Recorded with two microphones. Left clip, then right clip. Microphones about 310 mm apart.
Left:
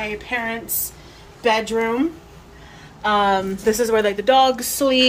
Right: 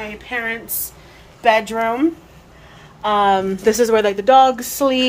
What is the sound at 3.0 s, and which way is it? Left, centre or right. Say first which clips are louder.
Speech: right 2 dB; centre.